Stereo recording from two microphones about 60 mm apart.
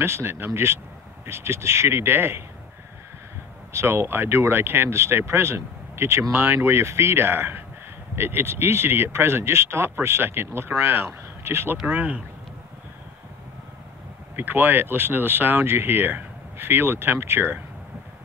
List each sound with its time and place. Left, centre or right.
0.0 s speech: right
3.7 s speech: right
11.9 s speech: right
14.3 s speech: right